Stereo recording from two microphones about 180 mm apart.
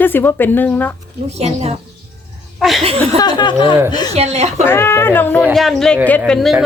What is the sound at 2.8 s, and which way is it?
Speech, 35° right (ahead or behind).